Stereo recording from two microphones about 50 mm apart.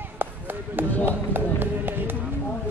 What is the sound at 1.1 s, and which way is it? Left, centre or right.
Speech, right.